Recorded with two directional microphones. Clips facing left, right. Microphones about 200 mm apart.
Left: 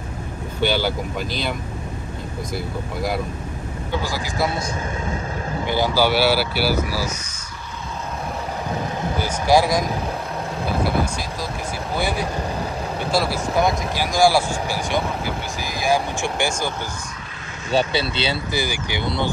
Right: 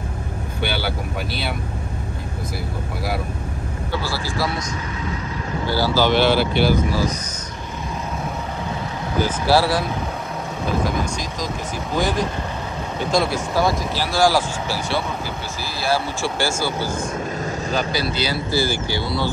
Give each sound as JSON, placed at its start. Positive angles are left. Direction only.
{"t": 3.9, "sound": "speech", "side_deg": 15}
{"t": 5.7, "sound": "speech", "side_deg": 15}
{"t": 9.2, "sound": "speech", "side_deg": 15}
{"t": 11.9, "sound": "speech", "side_deg": 10}
{"t": 13.6, "sound": "speech", "side_deg": 15}
{"t": 17.6, "sound": "speech", "side_deg": 30}